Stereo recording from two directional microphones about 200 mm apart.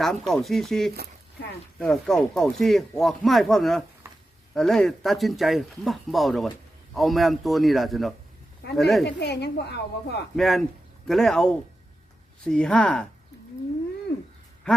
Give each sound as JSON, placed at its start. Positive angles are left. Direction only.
{"t": 0.0, "sound": "speech", "side_deg": 0}
{"t": 4.0, "sound": "a sound", "side_deg": -15}
{"t": 4.5, "sound": "speech", "side_deg": 0}
{"t": 9.0, "sound": "a woman's voice", "side_deg": 60}
{"t": 10.3, "sound": "speech", "side_deg": 0}